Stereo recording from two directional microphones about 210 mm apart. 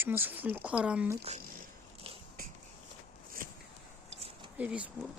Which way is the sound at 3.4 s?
40° right (ahead or behind).